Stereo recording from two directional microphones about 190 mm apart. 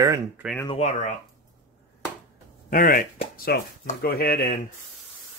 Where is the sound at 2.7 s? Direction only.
50° left (ahead or behind).